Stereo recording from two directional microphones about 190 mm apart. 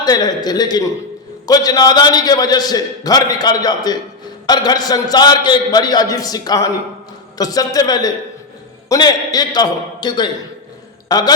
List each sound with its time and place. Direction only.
0.0 s a man's voice: 20° left (ahead or behind)